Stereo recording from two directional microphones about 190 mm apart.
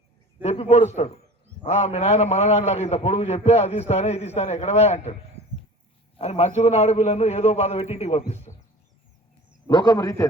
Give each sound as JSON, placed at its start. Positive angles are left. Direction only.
{"t": 0.4, "sound": "a man's voice", "side_deg": 35}
{"t": 6.1, "sound": "a man's voice", "side_deg": 35}
{"t": 8.5, "sound": "a sound", "side_deg": 40}
{"t": 9.6, "sound": "a man's voice", "side_deg": 20}